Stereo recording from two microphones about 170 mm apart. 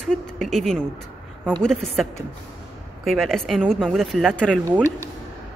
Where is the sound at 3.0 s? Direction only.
Centre (ahead or behind).